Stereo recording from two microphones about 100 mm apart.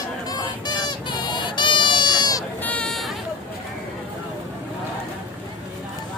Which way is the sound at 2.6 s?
15° left (ahead or behind).